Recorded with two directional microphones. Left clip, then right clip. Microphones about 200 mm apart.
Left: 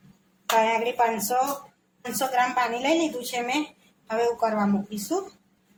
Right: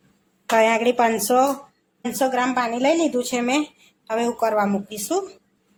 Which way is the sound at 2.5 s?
50° right (ahead or behind).